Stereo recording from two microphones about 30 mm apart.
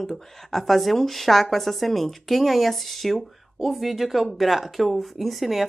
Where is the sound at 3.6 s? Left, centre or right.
Centre.